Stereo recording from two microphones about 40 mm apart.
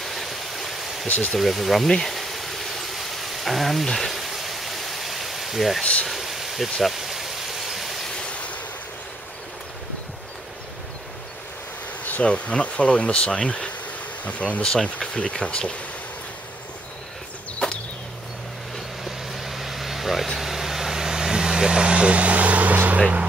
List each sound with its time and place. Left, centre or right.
0.0 s stream: centre
1.0 s speech: left
1.4 s speech: centre
1.9 s a sound: centre
8.2 s a sound: left
12.2 s speech: left
14.6 s speech: left
19.0 s vehicle: centre; by 23.2 s right